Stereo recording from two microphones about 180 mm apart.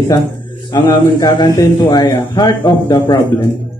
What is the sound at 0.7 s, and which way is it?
Speech, 25° left (ahead or behind).